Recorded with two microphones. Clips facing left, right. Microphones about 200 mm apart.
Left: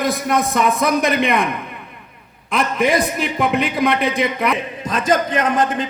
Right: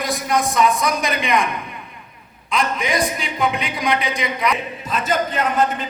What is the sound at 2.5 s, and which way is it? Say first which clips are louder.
A man's voice: left 4 dB; 60° left (ahead or behind).